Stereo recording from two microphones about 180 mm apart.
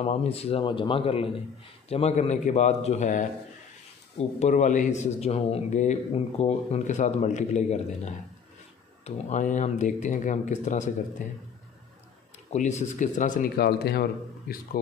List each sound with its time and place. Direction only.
0.0 s speech: 35° left (ahead or behind)
4.4 s speech: 40° left (ahead or behind)
12.4 s speech: 40° left (ahead or behind); by 14.6 s 55° left (ahead or behind)